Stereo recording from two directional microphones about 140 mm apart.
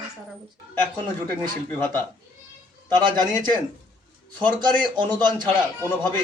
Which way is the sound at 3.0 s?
30° right (ahead or behind).